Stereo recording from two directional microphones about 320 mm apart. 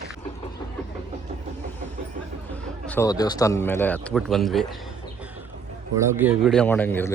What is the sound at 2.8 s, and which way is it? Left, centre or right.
Speech, centre.